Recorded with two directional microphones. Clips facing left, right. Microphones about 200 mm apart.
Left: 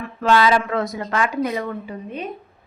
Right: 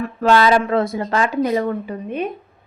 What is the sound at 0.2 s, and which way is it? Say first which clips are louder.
Speech: right 2 dB; 40° right (ahead or behind).